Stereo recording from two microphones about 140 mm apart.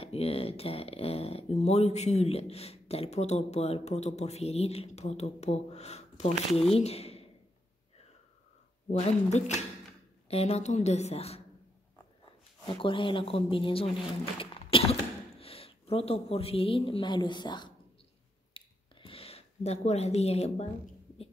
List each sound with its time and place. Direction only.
0.0 s a woman's voice: 45° left (ahead or behind)
8.8 s speech: 55° left (ahead or behind)
12.6 s speech: 35° left (ahead or behind)
18.5 s a sound: 40° left (ahead or behind)